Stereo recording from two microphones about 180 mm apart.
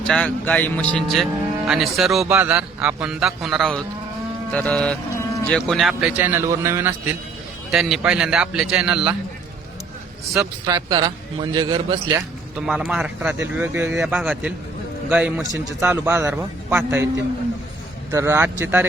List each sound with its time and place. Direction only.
0.1 s speech: 5° left (ahead or behind)
4.5 s music: 5° left (ahead or behind)
5.5 s a man's voice: centre (ahead or behind); by 6.9 s 15° right (ahead or behind)
7.7 s speech: centre (ahead or behind)
10.7 s a man's voice: 20° right (ahead or behind)
12.5 s a man's voice: 5° right (ahead or behind)
14.0 s a man's voice: 5° right (ahead or behind)
18.1 s a man's voice: 15° right (ahead or behind)